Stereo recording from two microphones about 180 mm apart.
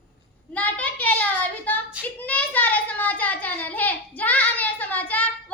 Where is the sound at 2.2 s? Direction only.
10° left (ahead or behind).